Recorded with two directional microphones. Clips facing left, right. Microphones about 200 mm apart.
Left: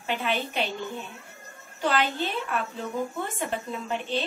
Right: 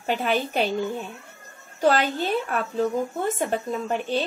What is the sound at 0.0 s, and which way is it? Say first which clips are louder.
Speech: right 5 dB; 40° right (ahead or behind).